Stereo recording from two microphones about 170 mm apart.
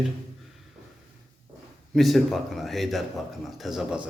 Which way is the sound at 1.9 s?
Centre (ahead or behind).